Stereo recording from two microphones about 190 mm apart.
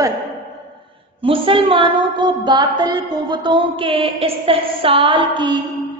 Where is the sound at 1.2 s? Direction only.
30° right (ahead or behind).